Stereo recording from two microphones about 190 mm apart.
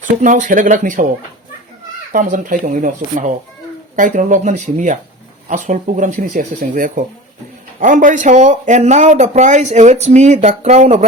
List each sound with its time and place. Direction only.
0.2 s speech: 40° right (ahead or behind)
2.1 s speech: 45° right (ahead or behind)